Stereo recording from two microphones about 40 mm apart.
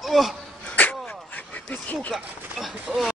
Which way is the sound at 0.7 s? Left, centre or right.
Left.